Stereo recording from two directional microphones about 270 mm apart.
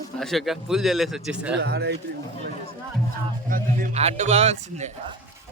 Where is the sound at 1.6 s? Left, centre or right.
Right.